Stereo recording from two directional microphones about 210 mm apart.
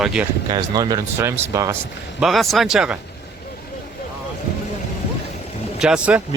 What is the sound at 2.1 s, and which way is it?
Speech, centre (ahead or behind).